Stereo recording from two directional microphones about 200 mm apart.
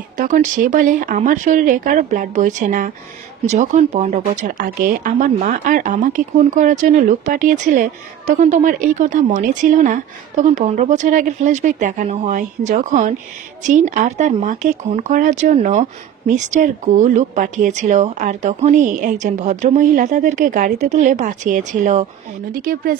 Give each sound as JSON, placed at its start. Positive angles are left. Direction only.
{"t": 0.2, "sound": "speech", "side_deg": -40}